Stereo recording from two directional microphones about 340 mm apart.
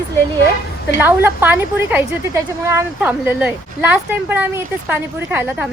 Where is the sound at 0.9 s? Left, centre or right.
Centre.